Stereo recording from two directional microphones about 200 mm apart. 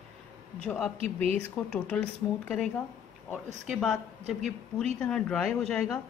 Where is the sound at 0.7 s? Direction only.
5° left (ahead or behind).